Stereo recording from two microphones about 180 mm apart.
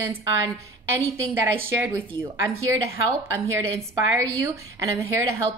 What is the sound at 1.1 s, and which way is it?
Speech, 10° right (ahead or behind).